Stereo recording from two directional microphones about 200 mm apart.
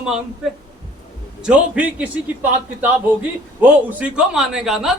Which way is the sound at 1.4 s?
5° right (ahead or behind).